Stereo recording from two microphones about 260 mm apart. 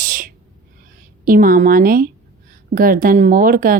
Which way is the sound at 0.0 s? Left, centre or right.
Right.